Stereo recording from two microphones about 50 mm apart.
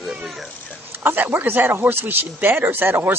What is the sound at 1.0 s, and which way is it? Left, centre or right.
Speech, right.